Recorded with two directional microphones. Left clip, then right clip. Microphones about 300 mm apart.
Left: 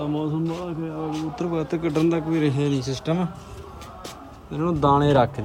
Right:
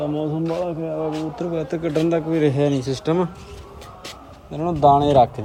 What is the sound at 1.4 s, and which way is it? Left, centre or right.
Speech, centre.